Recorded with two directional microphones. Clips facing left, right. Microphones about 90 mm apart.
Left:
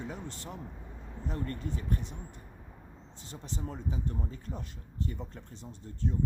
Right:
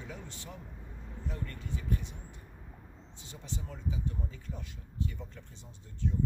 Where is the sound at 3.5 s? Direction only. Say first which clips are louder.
Left 2 dB; 40° left (ahead or behind).